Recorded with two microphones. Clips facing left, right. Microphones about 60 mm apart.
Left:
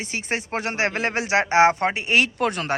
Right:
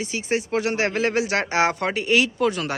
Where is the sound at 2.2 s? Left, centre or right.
Left.